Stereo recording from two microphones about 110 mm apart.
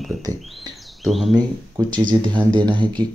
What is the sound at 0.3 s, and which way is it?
Speech, 35° right (ahead or behind).